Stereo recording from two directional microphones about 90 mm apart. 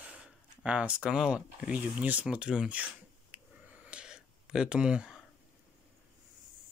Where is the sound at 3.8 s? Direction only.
10° right (ahead or behind).